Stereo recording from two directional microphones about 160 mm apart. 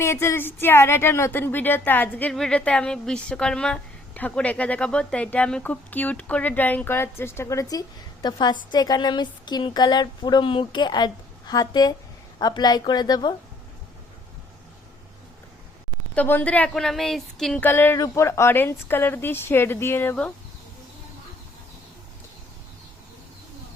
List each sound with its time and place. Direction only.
0.0 s speech: 15° left (ahead or behind)
16.1 s speech: 10° left (ahead or behind)